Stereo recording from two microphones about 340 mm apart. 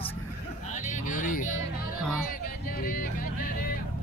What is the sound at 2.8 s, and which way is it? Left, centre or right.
Music, left.